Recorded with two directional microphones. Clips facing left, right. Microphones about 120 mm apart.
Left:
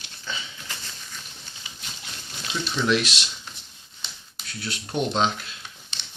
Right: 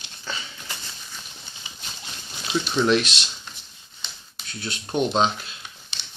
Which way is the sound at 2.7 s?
35° right (ahead or behind).